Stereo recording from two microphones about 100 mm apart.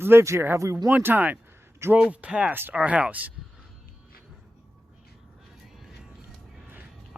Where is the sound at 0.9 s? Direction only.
15° right (ahead or behind).